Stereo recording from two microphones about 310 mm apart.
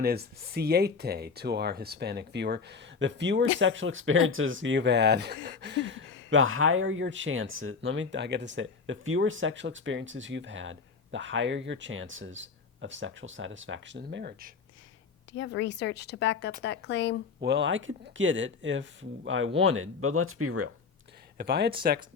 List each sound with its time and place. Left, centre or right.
0.0 s speech: right
15.3 s a woman's voice: left
17.4 s speech: right
21.3 s speech: right